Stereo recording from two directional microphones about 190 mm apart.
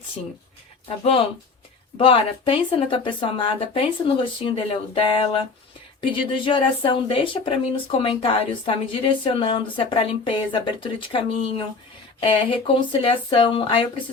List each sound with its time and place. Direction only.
0.9 s speech: 30° left (ahead or behind)